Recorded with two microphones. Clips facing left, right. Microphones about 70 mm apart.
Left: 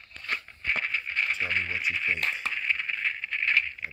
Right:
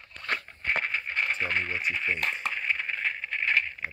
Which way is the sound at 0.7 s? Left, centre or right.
Right.